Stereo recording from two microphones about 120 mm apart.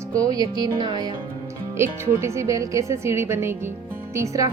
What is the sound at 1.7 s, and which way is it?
Speech, 20° right (ahead or behind).